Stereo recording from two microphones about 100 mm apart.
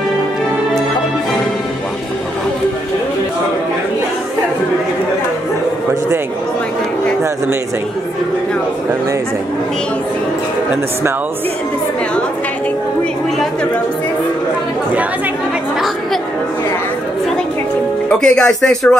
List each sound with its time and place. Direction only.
18.2 s speech: 5° left (ahead or behind)